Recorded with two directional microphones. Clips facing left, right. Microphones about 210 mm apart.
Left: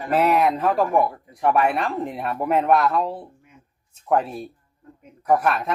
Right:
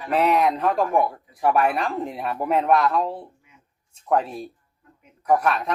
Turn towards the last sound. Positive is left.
turn(degrees=0)  # may be behind; listen again after turning